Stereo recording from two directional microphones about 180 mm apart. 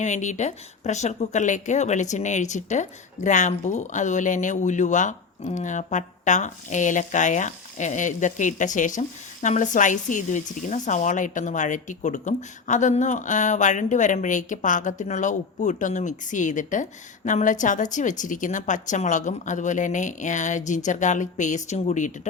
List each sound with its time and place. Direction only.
0.0 s speech: 40° left (ahead or behind)